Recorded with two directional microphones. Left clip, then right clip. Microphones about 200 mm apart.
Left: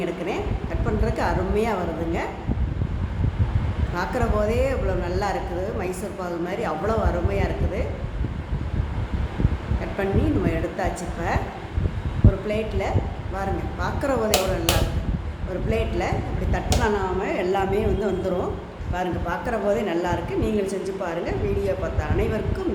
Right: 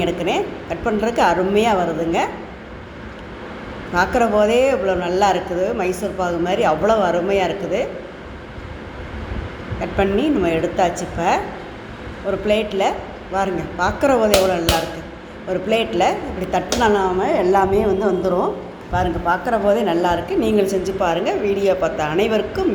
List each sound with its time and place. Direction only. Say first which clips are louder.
0.0 s a woman's voice: right 7 dB; 15° right (ahead or behind)
3.9 s a woman's voice: right 9 dB; 15° right (ahead or behind)
10.0 s a woman's voice: right 7 dB; 15° right (ahead or behind)
12.5 s a woman's voice: right 12 dB; 20° right (ahead or behind)
15.7 s a woman's voice: right 8 dB; 15° right (ahead or behind)